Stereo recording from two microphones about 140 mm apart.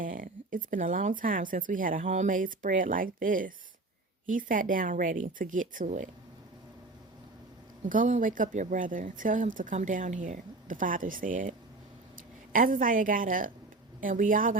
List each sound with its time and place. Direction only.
0.0 s speech: 75° right (ahead or behind)
7.9 s speech: 70° right (ahead or behind)
12.5 s speech: 80° right